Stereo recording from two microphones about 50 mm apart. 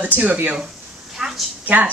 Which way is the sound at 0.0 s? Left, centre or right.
Right.